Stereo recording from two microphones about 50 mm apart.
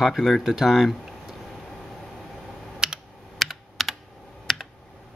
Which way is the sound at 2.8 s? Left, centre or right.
Centre.